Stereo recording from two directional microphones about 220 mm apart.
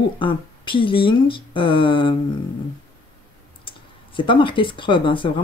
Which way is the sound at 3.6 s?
25° left (ahead or behind).